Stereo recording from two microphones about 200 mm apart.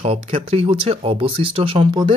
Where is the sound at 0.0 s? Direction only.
30° right (ahead or behind).